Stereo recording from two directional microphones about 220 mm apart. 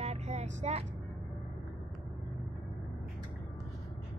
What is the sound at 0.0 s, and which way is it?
Vehicle, 30° right (ahead or behind).